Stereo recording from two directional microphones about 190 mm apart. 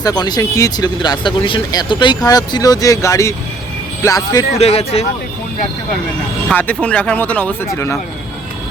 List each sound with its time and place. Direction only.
0.0 s speech: 20° left (ahead or behind)
4.5 s speech: 30° left (ahead or behind)
6.5 s speech: 10° left (ahead or behind)